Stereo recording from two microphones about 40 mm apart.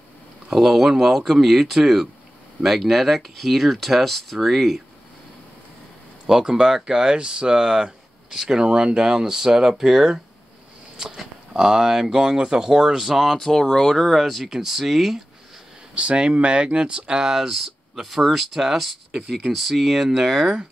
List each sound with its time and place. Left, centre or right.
0.5 s speech: centre
6.2 s speech: centre
11.5 s speech: centre
13.0 s speech: centre
13.4 s speech: centre
14.4 s speech: centre
15.9 s speech: right
17.2 s speech: centre